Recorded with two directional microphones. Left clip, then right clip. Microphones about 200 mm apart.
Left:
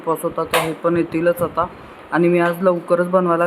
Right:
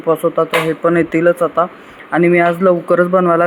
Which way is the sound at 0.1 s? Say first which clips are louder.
Right 6 dB; 10° right (ahead or behind).